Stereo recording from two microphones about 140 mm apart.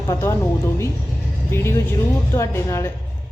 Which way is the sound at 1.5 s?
20° left (ahead or behind).